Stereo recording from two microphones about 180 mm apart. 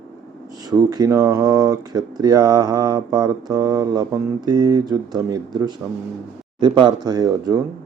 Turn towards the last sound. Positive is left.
turn(degrees=-20)  # may be behind; listen again after turning